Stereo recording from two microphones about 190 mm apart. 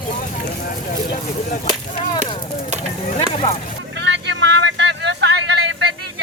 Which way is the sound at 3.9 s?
65° right (ahead or behind).